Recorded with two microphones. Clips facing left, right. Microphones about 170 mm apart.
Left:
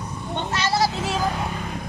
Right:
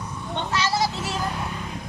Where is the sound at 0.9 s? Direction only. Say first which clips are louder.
Left 4 dB; 90° left.